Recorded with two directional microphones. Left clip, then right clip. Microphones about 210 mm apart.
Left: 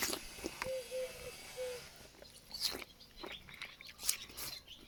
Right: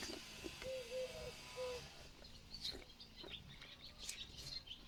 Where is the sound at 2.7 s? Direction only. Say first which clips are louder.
Left 6 dB; 40° left (ahead or behind).